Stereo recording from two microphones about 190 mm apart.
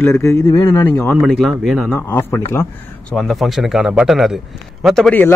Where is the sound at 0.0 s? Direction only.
10° left (ahead or behind).